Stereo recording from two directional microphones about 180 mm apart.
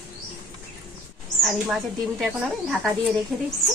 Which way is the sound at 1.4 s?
Centre (ahead or behind).